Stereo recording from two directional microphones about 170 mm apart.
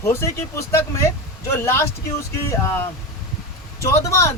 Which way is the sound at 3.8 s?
15° left (ahead or behind).